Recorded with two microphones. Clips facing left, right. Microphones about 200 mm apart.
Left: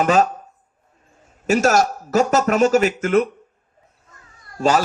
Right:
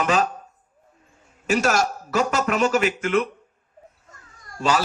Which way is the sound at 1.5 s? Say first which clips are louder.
Left 4 dB; 45° left (ahead or behind).